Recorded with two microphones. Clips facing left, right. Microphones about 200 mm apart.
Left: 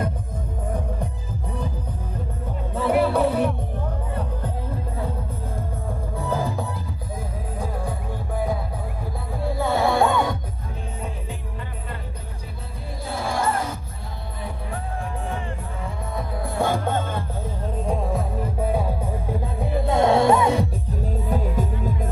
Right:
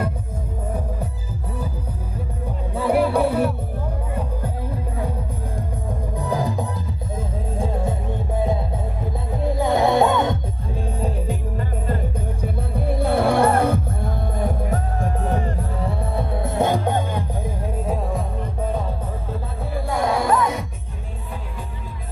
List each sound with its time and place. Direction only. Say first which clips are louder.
2.8 s music: right 1 dB; 10° right (ahead or behind)
6.1 s music: right 2 dB; 15° right (ahead or behind)
9.4 s music: right 3 dB; 20° right (ahead or behind)
12.7 s music: right 11 dB; 60° right (ahead or behind)
15.2 s music: right 6 dB; 40° right (ahead or behind)
16.4 s music: right 2 dB; 20° right (ahead or behind)
17.8 s music: left 2 dB; centre (ahead or behind)
19.6 s music: left 3 dB; 20° left (ahead or behind)
21.3 s music: left 10 dB; 40° left (ahead or behind)